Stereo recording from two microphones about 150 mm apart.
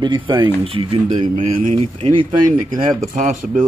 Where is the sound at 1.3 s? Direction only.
45° right (ahead or behind).